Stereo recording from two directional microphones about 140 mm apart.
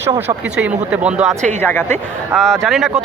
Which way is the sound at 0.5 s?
10° right (ahead or behind).